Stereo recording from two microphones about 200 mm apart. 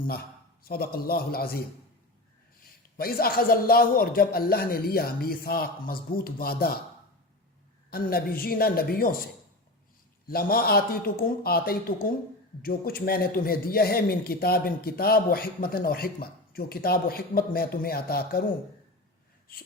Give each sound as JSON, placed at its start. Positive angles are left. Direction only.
{"t": 0.6, "sound": "a man's voice", "side_deg": 50}
{"t": 3.0, "sound": "a man's voice", "side_deg": 50}
{"t": 7.9, "sound": "a man's voice", "side_deg": 50}